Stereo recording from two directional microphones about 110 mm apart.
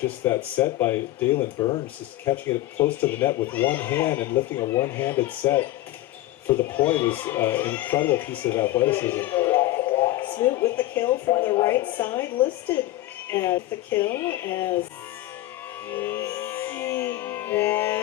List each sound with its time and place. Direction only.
0.0 s speech: 20° left (ahead or behind)
1.5 s speech: 40° left (ahead or behind)
2.3 s speech: 20° left (ahead or behind)
9.9 s a sound: 20° left (ahead or behind)
10.6 s speech: 15° left (ahead or behind)
11.0 s speech: 45° left (ahead or behind)
11.9 s speech: 20° left (ahead or behind)
15.9 s music: 20° left (ahead or behind)